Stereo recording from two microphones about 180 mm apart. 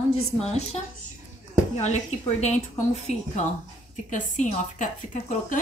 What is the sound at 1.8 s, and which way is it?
A woman's voice, 40° left (ahead or behind).